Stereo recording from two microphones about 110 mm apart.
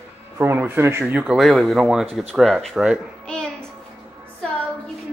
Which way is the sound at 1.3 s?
Centre (ahead or behind).